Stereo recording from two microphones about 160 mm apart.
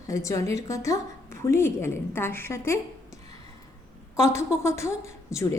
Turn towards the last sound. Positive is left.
turn(degrees=20)  # may be behind; listen again after turning